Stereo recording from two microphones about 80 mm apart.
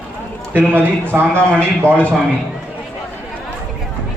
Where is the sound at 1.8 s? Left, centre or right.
Centre.